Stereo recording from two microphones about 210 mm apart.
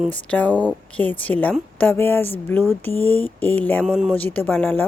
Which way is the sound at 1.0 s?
5° left (ahead or behind).